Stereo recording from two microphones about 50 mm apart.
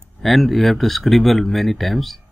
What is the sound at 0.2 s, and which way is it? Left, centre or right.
Speech, centre.